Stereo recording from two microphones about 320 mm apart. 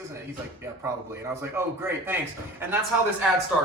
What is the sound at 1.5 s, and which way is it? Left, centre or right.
Speech, centre.